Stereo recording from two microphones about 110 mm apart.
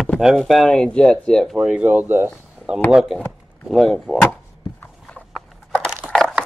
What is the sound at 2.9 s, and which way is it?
Speech, 5° right (ahead or behind).